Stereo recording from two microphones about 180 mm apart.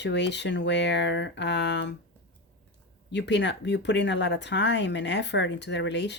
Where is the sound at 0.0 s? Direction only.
75° left (ahead or behind).